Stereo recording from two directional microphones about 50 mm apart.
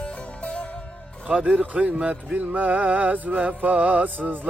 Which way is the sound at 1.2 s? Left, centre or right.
Right.